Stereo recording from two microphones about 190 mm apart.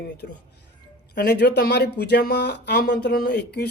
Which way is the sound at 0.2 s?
65° left (ahead or behind).